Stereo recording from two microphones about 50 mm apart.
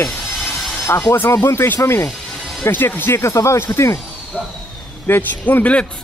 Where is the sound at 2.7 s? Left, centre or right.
Left.